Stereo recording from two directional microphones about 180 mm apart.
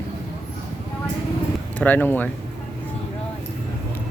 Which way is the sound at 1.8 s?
10° left (ahead or behind).